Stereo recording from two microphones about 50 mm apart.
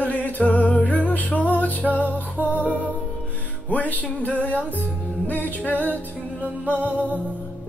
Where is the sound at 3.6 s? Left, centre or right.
Left.